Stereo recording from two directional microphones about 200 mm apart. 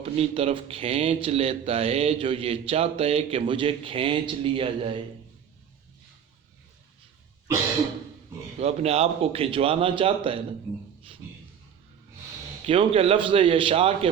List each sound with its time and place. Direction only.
0.0 s a man's voice: 30° right (ahead or behind)
8.5 s a man's voice: 30° right (ahead or behind)
12.6 s a man's voice: 25° right (ahead or behind)